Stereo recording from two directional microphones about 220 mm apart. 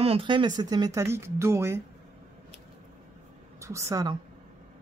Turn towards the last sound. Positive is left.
turn(degrees=-15)  # may be behind; listen again after turning